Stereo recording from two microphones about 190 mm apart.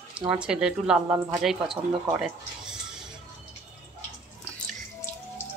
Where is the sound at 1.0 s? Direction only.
15° right (ahead or behind).